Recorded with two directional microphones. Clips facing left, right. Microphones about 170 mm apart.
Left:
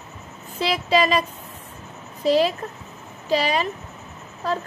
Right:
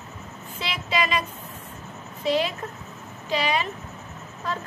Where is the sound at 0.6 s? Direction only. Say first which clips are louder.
Left 7 dB; 35° left (ahead or behind).